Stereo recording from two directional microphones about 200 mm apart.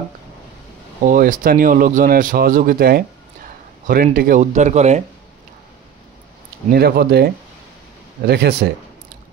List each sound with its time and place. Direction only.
1.0 s speech: 40° right (ahead or behind)
6.7 s a man's voice: 50° right (ahead or behind)